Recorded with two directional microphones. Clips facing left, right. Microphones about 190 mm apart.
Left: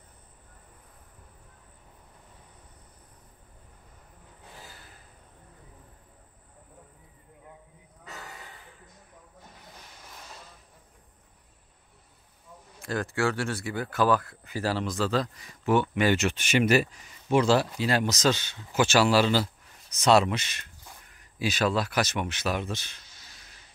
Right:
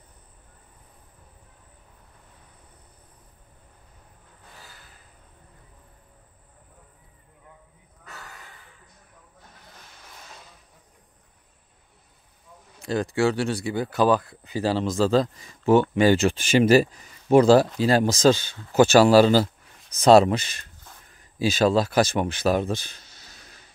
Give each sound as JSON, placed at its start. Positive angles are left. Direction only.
{"t": 8.0, "sound": "a sound", "side_deg": 15}
{"t": 10.0, "sound": "vehicle", "side_deg": 0}
{"t": 12.8, "sound": "speech", "side_deg": -20}